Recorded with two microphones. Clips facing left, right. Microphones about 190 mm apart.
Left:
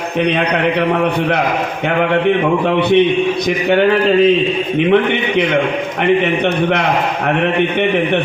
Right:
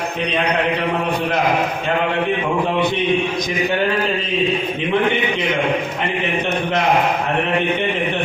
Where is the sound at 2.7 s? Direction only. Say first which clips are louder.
Left 7 dB; 65° left (ahead or behind).